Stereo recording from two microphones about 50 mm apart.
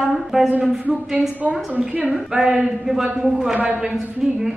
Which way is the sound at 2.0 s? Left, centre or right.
Centre.